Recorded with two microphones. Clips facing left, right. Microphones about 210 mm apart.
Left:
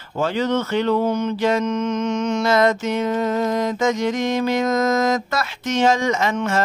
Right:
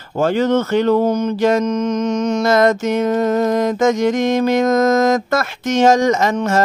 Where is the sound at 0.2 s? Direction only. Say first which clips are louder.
Right 5 dB; 50° right (ahead or behind).